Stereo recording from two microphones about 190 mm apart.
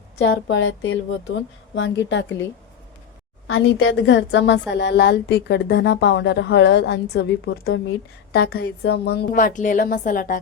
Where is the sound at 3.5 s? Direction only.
85° left.